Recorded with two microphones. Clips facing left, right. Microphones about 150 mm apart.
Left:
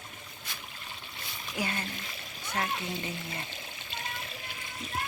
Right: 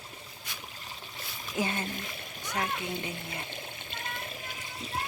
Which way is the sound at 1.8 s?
50° right (ahead or behind).